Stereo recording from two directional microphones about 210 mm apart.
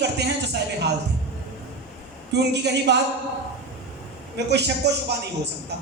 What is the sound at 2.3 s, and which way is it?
Speech, 55° right (ahead or behind).